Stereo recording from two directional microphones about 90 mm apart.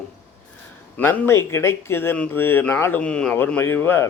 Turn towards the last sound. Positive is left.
turn(degrees=25)  # may be behind; listen again after turning